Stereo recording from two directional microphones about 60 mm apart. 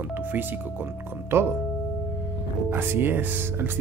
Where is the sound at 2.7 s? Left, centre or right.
Right.